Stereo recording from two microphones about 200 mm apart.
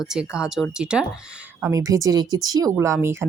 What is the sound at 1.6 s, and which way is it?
Speech, 15° right (ahead or behind).